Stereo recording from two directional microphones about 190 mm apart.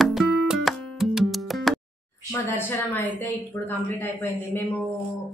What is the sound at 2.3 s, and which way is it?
A woman's voice, 10° left (ahead or behind).